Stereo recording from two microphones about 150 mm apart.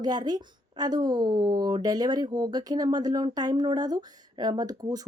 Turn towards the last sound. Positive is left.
turn(degrees=-25)  # may be behind; listen again after turning